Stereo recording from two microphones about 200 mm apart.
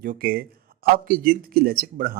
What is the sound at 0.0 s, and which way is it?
Speech, 45° right (ahead or behind).